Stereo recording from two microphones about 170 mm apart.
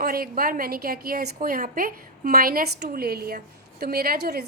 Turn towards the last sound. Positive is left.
turn(degrees=-65)  # may be behind; listen again after turning